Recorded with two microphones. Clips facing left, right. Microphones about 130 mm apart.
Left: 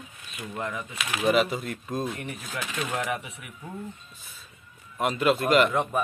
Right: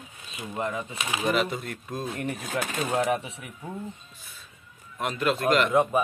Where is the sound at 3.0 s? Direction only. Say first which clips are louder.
Right 5 dB; 30° right (ahead or behind).